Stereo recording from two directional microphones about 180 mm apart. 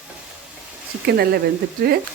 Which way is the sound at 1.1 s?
60° right (ahead or behind).